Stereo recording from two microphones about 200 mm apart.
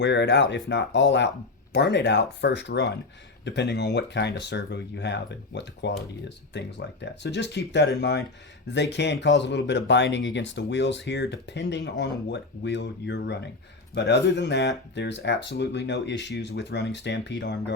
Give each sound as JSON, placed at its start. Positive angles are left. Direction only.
{"t": 0.0, "sound": "speech", "side_deg": 60}